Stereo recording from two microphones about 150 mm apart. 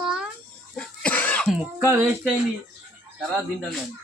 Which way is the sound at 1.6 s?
15° right (ahead or behind).